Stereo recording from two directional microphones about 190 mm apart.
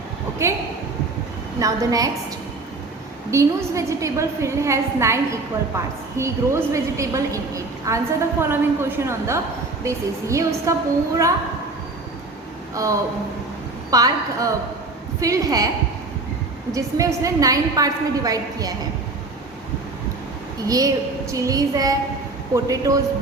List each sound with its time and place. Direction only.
0.4 s a woman's voice: 15° right (ahead or behind)
3.3 s a woman's voice: 15° right (ahead or behind)
12.7 s a woman's voice: 15° right (ahead or behind)
16.7 s a woman's voice: 15° right (ahead or behind)
20.7 s a woman's voice: 20° right (ahead or behind)